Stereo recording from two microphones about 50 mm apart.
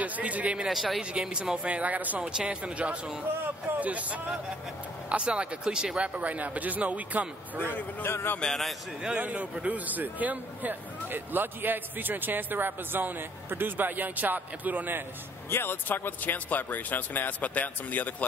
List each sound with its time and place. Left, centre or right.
0.0 s speech: right
0.7 s speech: centre
1.1 s speech: centre
1.6 s speech: right
2.2 s a man's voice: centre
7.5 s a man's voice: left
8.5 s speech: centre
9.1 s a man's voice: right
15.5 s speech: left